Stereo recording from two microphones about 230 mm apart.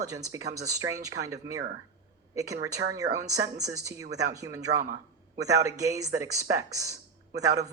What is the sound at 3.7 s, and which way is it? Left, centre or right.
Speech, centre.